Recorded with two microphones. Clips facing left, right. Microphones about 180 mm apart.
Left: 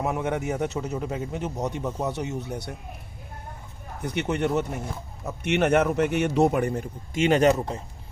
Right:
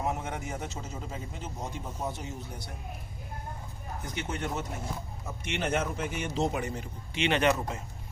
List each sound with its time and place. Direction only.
0.0 s speech: 60° left (ahead or behind)
4.0 s a man's voice: 65° left (ahead or behind); by 7.5 s 40° left (ahead or behind)